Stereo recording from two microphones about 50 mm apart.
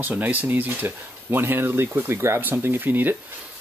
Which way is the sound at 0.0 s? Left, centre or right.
Right.